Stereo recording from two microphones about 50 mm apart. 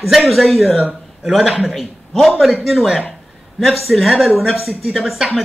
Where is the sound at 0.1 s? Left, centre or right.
Centre.